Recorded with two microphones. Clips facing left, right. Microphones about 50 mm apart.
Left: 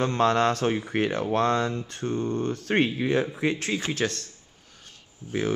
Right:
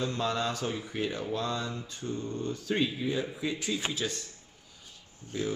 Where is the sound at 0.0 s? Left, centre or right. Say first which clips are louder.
Left 9 dB; left.